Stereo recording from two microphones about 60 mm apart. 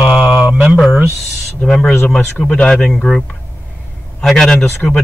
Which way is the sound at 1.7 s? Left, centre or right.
Centre.